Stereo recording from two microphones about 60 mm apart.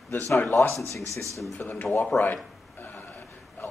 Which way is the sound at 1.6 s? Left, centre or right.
Left.